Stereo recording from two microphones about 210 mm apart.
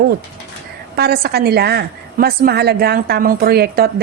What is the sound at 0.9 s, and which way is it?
A woman's voice, 50° right (ahead or behind).